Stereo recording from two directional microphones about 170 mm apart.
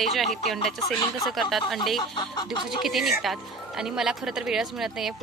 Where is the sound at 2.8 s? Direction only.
Centre (ahead or behind).